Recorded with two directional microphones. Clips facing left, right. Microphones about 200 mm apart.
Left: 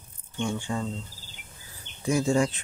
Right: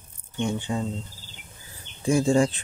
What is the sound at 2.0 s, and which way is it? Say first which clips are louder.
Speech: right 3 dB; 30° right (ahead or behind).